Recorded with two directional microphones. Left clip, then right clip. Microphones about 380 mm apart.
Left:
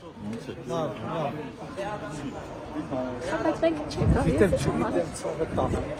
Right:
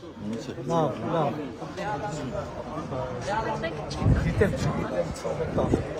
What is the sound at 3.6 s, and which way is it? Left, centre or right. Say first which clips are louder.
Speech: left 5 dB; centre.